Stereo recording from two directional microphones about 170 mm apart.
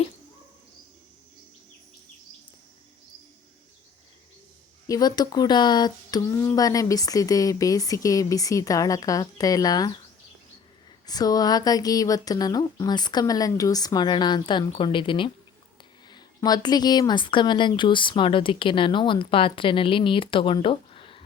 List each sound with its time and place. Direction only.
4.9 s a woman's voice: 25° left (ahead or behind)
11.0 s a woman's voice: 20° left (ahead or behind)